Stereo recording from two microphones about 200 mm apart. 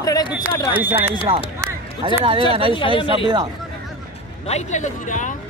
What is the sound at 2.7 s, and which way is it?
Speech, 25° left (ahead or behind).